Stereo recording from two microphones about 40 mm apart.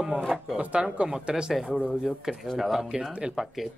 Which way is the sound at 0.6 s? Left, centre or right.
Right.